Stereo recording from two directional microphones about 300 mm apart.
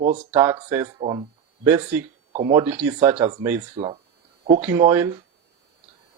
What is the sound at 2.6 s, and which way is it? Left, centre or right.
Speech, centre.